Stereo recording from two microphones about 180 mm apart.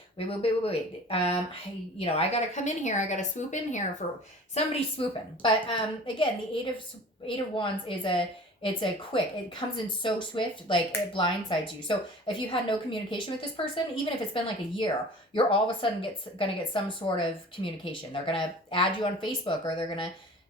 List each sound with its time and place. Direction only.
0.2 s speech: 30° left (ahead or behind)
4.5 s speech: 30° left (ahead or behind)